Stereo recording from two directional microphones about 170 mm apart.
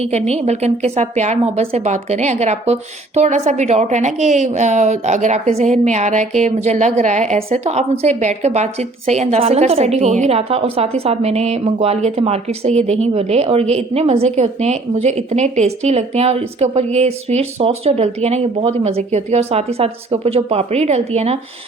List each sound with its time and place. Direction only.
0.0 s a woman's voice: 40° right (ahead or behind)